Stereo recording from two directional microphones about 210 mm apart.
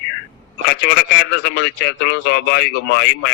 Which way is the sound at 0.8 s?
50° left (ahead or behind).